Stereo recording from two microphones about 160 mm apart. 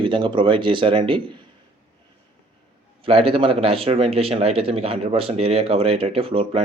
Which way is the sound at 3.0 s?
35° right (ahead or behind).